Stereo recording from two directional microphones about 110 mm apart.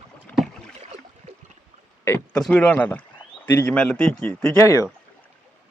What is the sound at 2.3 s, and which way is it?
A man's voice, 10° left (ahead or behind).